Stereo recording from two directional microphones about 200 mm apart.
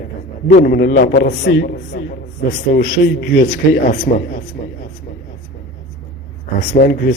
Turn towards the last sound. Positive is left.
turn(degrees=50)  # may be behind; listen again after turning